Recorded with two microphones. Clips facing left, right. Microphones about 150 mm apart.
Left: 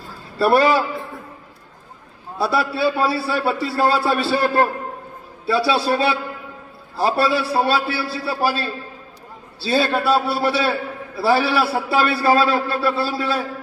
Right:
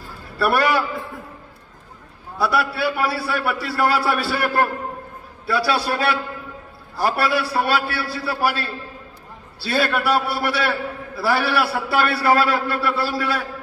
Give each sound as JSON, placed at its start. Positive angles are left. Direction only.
{"t": 0.4, "sound": "a man's voice", "side_deg": 25}
{"t": 2.3, "sound": "a man's voice", "side_deg": 25}
{"t": 9.7, "sound": "a man's voice", "side_deg": 25}